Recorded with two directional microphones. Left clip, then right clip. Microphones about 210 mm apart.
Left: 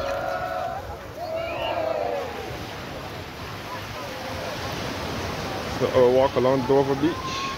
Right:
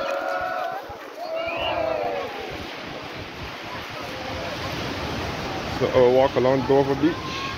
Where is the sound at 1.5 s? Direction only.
50° left (ahead or behind).